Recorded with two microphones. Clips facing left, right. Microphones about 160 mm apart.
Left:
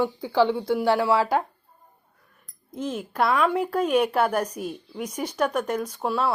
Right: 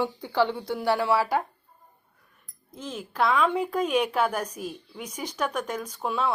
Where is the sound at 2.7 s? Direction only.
55° left (ahead or behind).